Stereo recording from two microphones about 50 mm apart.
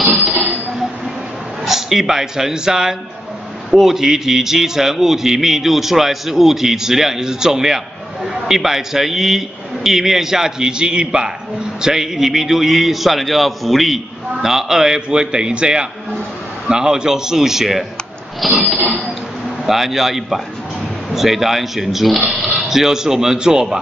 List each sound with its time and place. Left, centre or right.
0.0 s a sound: centre
1.6 s a man's voice: centre
19.6 s speech: centre